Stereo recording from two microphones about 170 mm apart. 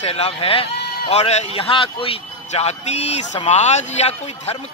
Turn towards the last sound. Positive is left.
turn(degrees=40)  # may be behind; listen again after turning